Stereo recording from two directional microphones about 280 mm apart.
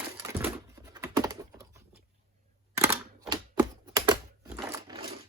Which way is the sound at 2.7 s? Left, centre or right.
Centre.